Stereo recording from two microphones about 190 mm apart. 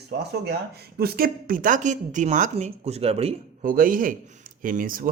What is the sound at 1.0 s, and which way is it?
Speech, 50° right (ahead or behind).